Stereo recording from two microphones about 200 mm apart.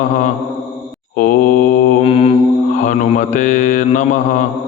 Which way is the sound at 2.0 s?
30° left (ahead or behind).